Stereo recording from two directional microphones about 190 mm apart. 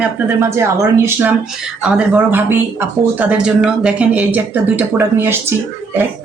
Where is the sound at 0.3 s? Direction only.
15° right (ahead or behind).